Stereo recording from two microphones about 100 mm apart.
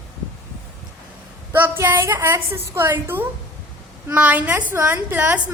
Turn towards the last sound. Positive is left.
turn(degrees=-20)  # may be behind; listen again after turning